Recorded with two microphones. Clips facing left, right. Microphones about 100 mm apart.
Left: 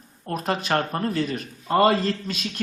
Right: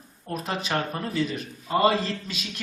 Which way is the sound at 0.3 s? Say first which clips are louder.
Left 4 dB; 55° left (ahead or behind).